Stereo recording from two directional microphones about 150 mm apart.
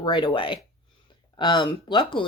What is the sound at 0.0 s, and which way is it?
Speech, 30° left (ahead or behind).